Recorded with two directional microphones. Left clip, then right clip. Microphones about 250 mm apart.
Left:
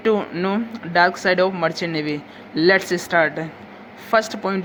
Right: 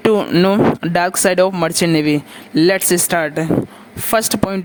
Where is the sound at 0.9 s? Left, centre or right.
Right.